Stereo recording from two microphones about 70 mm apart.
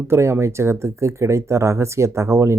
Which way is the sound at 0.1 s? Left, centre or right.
Right.